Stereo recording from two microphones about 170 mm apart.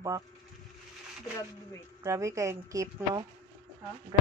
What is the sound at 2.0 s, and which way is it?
A woman's voice, 20° right (ahead or behind).